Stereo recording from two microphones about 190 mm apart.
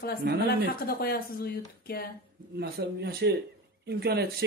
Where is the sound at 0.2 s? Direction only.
60° right (ahead or behind).